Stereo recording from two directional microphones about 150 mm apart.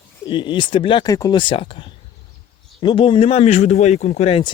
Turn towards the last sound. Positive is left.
turn(degrees=45)  # may be behind; listen again after turning